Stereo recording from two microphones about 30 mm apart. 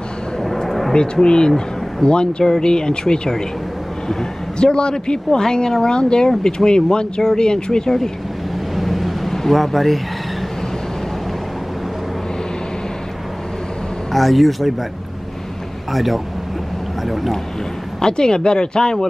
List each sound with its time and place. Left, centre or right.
0.7 s a sound: centre
1.2 s a man's voice: left
4.6 s a man's voice: left
8.7 s vehicle: centre
9.3 s speech: centre
14.1 s speech: centre
15.9 s speech: centre
18.0 s speech: left